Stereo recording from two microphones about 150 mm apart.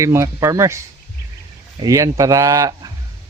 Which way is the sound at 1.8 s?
25° right (ahead or behind).